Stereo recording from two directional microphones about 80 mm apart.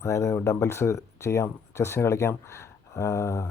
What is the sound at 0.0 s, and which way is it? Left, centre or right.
Speech, left.